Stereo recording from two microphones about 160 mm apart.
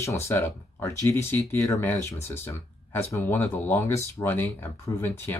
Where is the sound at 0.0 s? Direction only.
20° left (ahead or behind).